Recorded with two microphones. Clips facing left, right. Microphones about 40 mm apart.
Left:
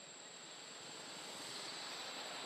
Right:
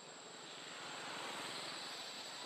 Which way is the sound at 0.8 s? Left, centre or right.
Right.